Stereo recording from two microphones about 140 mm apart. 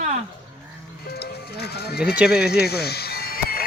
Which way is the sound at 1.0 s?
90° left.